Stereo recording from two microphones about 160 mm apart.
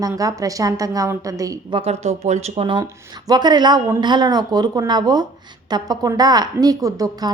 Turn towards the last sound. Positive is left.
turn(degrees=-20)  # may be behind; listen again after turning